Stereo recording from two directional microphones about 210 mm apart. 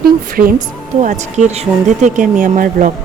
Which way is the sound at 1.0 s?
35° right (ahead or behind).